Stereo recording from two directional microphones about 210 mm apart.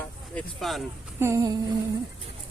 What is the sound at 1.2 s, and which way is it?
Speech, 15° right (ahead or behind).